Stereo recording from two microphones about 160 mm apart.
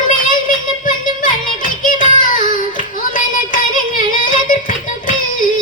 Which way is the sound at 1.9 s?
60° left (ahead or behind).